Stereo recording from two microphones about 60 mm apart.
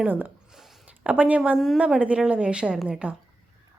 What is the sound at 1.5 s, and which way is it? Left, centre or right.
Speech, centre.